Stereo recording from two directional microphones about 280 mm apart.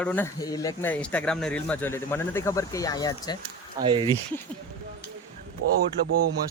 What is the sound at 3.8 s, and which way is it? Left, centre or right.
Speech, centre.